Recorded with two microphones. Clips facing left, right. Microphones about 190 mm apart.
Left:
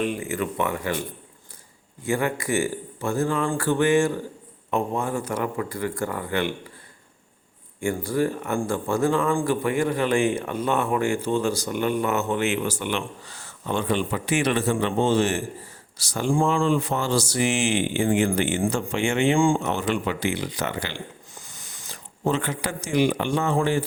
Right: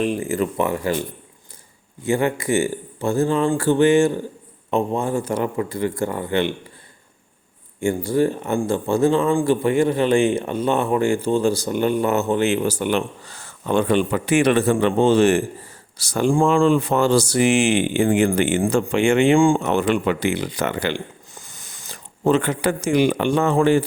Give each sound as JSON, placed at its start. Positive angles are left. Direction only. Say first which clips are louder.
{"t": 0.0, "sound": "speech", "louder": "right 5 dB", "side_deg": -35}
{"t": 2.0, "sound": "speech", "louder": "right 4 dB", "side_deg": -25}
{"t": 7.8, "sound": "speech", "louder": "right 5 dB", "side_deg": -25}
{"t": 16.6, "sound": "speech", "louder": "right 6 dB", "side_deg": -65}
{"t": 21.3, "sound": "a sound", "louder": "right 2 dB", "side_deg": -50}
{"t": 22.2, "sound": "speech", "louder": "right 7 dB", "side_deg": -65}